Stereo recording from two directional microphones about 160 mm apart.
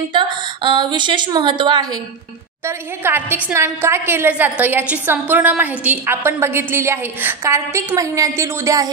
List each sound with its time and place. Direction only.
0.7 s speech: 30° right (ahead or behind)
2.6 s a woman's voice: 15° right (ahead or behind)